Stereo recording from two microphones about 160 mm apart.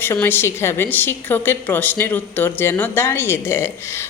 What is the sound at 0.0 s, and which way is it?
A woman's voice, 15° left (ahead or behind).